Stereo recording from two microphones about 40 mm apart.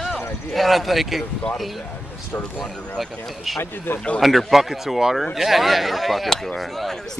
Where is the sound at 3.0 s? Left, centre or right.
Centre.